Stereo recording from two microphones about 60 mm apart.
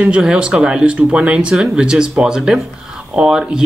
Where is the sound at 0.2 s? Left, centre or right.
Centre.